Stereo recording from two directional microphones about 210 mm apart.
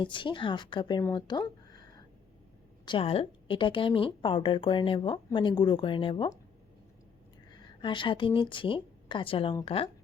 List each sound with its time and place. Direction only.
0.0 s speech: 25° left (ahead or behind)
7.6 s a woman's voice: 20° left (ahead or behind)